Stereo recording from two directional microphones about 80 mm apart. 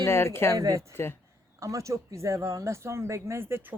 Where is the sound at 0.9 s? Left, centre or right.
Left.